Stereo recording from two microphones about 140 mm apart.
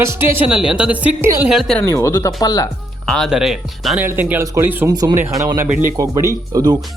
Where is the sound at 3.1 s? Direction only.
Centre (ahead or behind).